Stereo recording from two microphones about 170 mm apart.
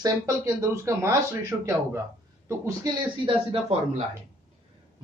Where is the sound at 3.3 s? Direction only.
35° right (ahead or behind).